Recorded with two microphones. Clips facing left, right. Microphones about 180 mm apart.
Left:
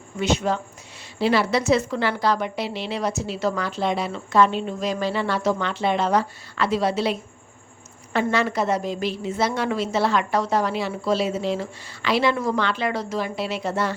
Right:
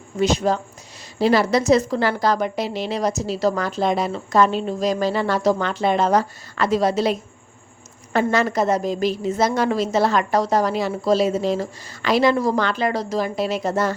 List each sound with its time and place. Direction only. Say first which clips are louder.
0.2 s a woman's voice: right 3 dB; 40° right (ahead or behind)